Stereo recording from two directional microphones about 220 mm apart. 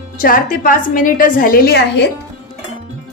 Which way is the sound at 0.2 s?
40° left (ahead or behind).